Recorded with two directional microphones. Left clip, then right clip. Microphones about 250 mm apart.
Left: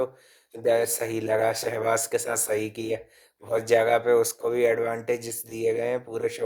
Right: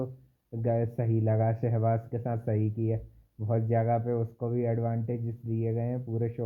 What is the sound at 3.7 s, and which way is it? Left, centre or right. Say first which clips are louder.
Speech: left 10 dB; left.